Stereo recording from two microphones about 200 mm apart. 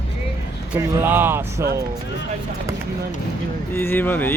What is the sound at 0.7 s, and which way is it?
Speech, 10° right (ahead or behind).